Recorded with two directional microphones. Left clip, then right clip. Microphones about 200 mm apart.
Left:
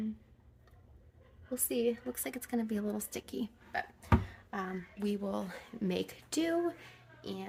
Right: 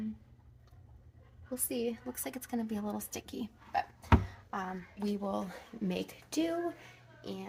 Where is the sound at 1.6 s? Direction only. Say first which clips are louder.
Left 4 dB; 25° left (ahead or behind).